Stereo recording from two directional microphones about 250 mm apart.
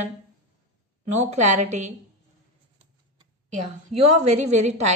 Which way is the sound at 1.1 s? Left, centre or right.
Right.